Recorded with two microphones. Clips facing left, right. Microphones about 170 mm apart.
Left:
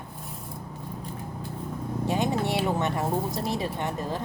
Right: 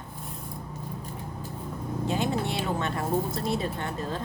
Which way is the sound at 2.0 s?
15° left (ahead or behind).